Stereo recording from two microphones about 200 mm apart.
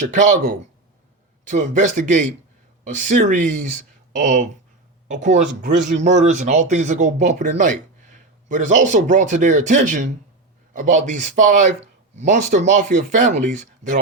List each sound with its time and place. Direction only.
0.1 s speech: 40° right (ahead or behind)